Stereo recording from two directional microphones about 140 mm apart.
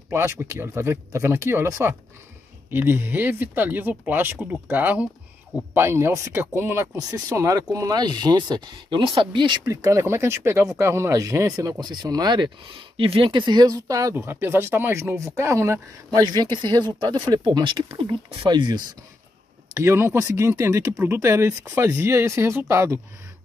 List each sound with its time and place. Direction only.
0.1 s speech: 20° right (ahead or behind); by 9.6 s 35° right (ahead or behind)
9.7 s speech: 25° right (ahead or behind)
19.7 s speech: 20° right (ahead or behind)